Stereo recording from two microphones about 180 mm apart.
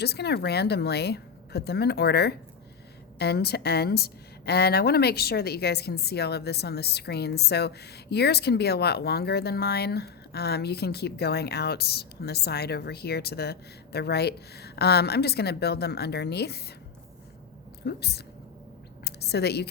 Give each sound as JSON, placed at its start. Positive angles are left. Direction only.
{"t": 0.0, "sound": "a woman's voice", "side_deg": 65}
{"t": 17.8, "sound": "a woman's voice", "side_deg": 65}
{"t": 19.0, "sound": "a sound", "side_deg": 65}